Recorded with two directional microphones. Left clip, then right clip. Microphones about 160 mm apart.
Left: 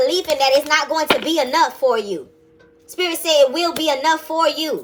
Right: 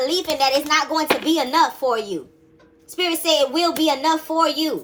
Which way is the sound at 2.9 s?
20° right (ahead or behind).